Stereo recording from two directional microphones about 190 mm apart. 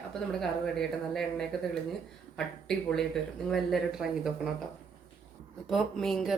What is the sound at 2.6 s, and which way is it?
A woman's voice, centre (ahead or behind).